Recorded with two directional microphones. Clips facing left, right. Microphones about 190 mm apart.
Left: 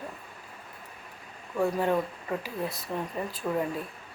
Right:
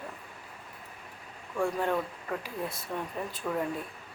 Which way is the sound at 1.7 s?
10° left (ahead or behind).